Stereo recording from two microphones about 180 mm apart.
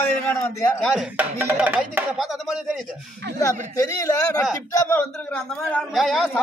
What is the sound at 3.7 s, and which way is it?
A man's voice, 15° left (ahead or behind).